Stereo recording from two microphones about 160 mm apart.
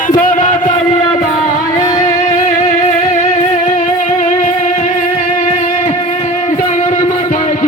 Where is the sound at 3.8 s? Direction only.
55° left (ahead or behind).